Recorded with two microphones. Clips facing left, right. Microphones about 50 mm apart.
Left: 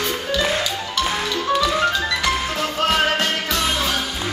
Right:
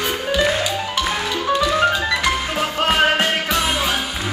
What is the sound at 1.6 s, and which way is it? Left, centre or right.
Music, right.